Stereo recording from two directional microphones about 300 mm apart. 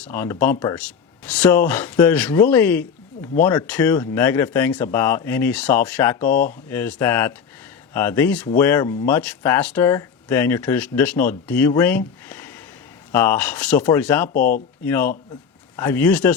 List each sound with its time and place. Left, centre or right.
0.0 s speech: centre
6.2 s speech: left
6.7 s speech: centre
14.3 s speech: left
14.8 s speech: centre